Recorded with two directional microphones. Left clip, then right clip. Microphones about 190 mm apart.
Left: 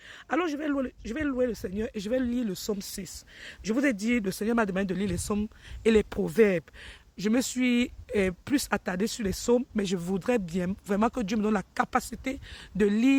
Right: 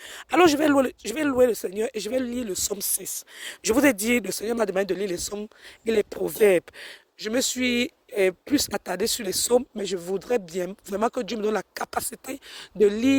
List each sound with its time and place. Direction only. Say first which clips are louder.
0.1 s speech: right 10 dB; 50° right (ahead or behind)
4.3 s speech: right 2 dB; 30° right (ahead or behind)
7.2 s speech: right 3 dB; 20° right (ahead or behind)
9.8 s speech: right 1 dB; 15° right (ahead or behind)